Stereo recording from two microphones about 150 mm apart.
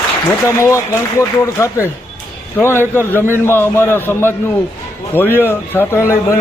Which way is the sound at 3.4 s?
15° left (ahead or behind).